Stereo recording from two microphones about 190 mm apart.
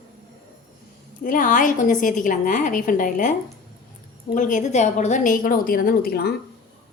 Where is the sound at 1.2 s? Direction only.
45° left (ahead or behind).